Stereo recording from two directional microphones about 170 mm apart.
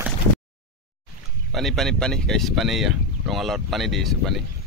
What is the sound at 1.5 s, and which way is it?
Speech, centre (ahead or behind).